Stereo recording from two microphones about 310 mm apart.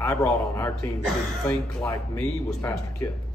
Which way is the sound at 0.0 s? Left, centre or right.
Centre.